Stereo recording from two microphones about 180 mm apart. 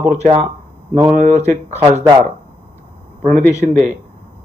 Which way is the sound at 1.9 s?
20° right (ahead or behind).